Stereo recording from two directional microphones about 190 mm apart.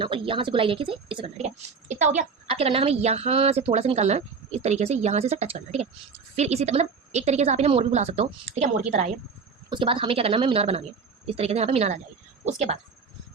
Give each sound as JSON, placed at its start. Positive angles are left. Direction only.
{"t": 0.0, "sound": "a woman's voice", "side_deg": -25}